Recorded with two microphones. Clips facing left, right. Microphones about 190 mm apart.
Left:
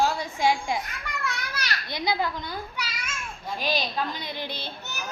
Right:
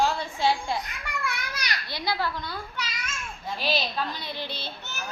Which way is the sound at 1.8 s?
20° left (ahead or behind).